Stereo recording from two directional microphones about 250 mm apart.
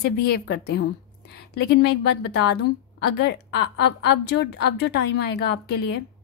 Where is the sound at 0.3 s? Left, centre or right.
Left.